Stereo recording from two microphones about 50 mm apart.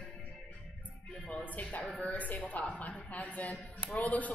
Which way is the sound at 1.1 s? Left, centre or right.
Left.